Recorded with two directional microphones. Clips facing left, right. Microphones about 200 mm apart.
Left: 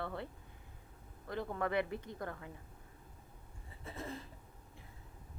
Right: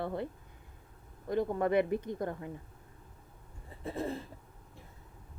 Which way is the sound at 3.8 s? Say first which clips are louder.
Right 10 dB; 60° right (ahead or behind).